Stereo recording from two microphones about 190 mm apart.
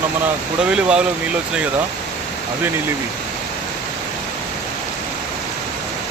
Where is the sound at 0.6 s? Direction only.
5° right (ahead or behind).